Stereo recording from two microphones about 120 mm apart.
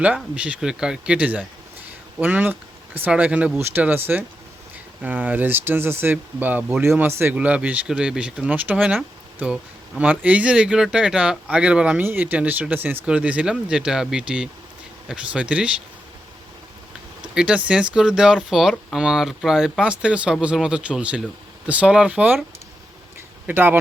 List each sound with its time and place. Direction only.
0.3 s speech: 10° right (ahead or behind)
10.0 s speech: 10° right (ahead or behind)
17.3 s speech: 10° right (ahead or behind)
23.5 s speech: 15° right (ahead or behind)